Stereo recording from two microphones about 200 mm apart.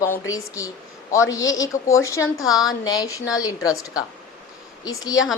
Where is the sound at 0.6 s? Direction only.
15° left (ahead or behind).